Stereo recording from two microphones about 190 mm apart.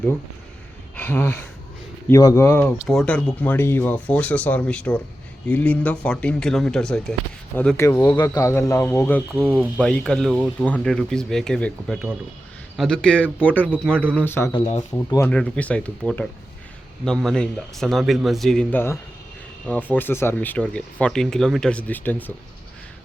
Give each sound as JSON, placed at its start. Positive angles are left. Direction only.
{"t": 0.9, "sound": "speech", "side_deg": 10}
{"t": 9.3, "sound": "speech", "side_deg": -10}
{"t": 9.7, "sound": "speech", "side_deg": 5}
{"t": 14.5, "sound": "speech", "side_deg": 35}
{"t": 14.9, "sound": "speech", "side_deg": 15}